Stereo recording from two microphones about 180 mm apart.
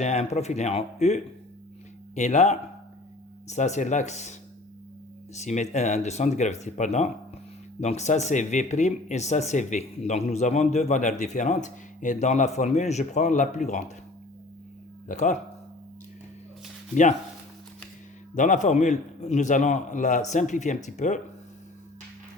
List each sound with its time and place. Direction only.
0.0 s speech: 40° left (ahead or behind)
15.0 s speech: 40° left (ahead or behind)
16.9 s speech: 45° left (ahead or behind)
18.3 s speech: 45° left (ahead or behind)